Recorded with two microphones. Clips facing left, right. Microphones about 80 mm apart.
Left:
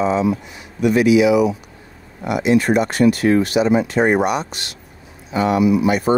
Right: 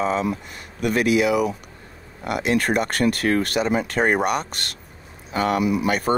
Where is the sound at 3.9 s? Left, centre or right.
Left.